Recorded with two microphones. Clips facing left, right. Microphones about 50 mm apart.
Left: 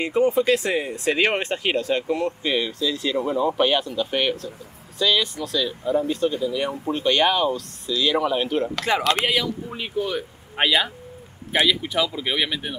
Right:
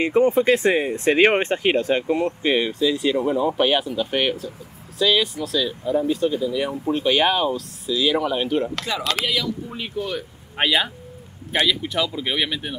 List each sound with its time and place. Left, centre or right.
0.0 s speech: right; by 8.8 s centre
9.0 s speech: left
9.7 s speech: centre